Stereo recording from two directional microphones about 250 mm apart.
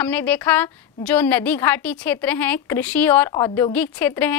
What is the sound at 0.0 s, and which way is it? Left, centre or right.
A woman's voice, centre.